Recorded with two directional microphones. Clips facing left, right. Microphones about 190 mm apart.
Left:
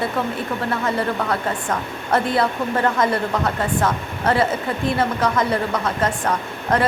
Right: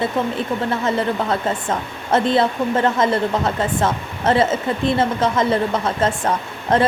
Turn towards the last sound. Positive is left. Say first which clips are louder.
# right 2 dB
turn(degrees=-25)  # may be behind; listen again after turning